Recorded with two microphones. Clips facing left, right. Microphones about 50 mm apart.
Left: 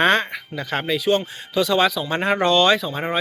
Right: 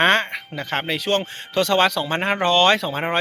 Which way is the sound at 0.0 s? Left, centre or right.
Right.